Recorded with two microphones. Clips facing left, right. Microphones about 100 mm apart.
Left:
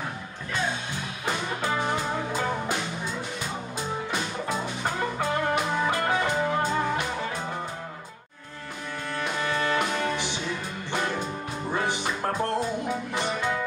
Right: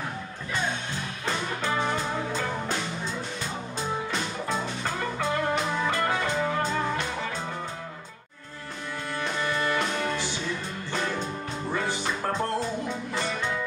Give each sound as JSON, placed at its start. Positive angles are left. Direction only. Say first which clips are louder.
{"t": 1.2, "sound": "music", "louder": "left 1 dB", "side_deg": 15}
{"t": 9.2, "sound": "music", "louder": "left 1 dB", "side_deg": 10}
{"t": 11.7, "sound": "music", "louder": "left 2 dB", "side_deg": 20}